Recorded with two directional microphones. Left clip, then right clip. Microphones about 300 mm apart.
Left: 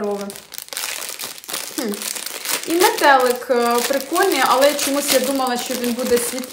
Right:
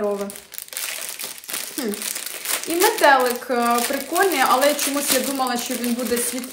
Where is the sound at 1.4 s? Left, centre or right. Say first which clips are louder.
Left 2 dB; centre.